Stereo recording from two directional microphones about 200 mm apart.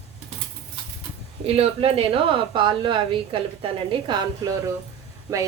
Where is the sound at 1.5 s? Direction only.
30° right (ahead or behind).